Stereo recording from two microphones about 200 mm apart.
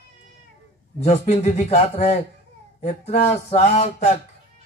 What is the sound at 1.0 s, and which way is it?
Speech, 35° left (ahead or behind).